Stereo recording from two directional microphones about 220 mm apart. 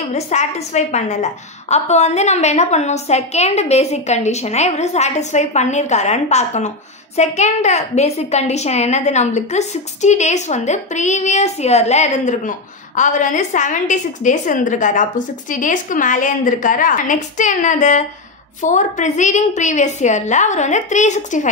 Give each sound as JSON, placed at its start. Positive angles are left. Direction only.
{"t": 0.1, "sound": "a woman's voice", "side_deg": 30}